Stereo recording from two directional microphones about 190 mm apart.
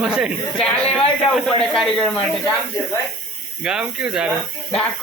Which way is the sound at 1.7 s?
Centre (ahead or behind).